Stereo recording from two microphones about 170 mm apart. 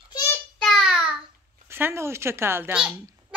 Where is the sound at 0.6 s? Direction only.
Centre (ahead or behind).